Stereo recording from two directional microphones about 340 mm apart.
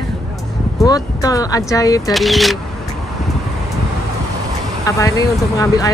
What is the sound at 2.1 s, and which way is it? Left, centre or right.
Speech, centre.